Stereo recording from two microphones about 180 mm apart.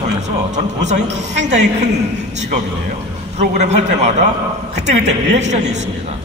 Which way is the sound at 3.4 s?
40° right (ahead or behind).